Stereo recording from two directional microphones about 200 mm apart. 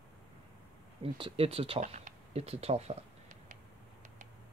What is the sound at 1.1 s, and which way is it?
Speech, 25° right (ahead or behind).